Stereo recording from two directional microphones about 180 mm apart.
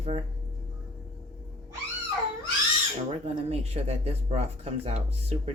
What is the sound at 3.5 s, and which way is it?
Speech, 35° right (ahead or behind).